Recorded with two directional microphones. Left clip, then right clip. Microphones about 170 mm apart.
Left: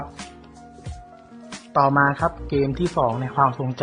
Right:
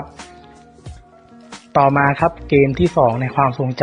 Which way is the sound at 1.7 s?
30° right (ahead or behind).